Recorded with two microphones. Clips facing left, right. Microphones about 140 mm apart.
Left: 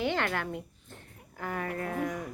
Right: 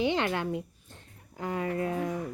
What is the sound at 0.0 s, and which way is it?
Speech, 15° right (ahead or behind).